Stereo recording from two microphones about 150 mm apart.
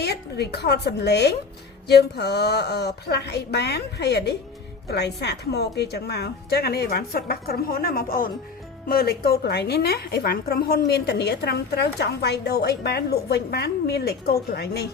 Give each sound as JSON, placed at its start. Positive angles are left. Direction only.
{"t": 0.0, "sound": "a woman's voice", "side_deg": 90}
{"t": 8.9, "sound": "a woman's voice", "side_deg": 85}